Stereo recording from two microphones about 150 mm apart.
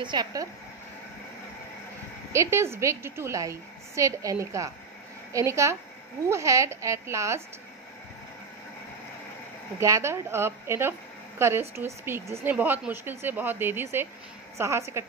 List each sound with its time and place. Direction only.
0.0 s a woman's voice: 30° right (ahead or behind)
2.3 s a woman's voice: 20° right (ahead or behind)
9.8 s a woman's voice: 20° right (ahead or behind)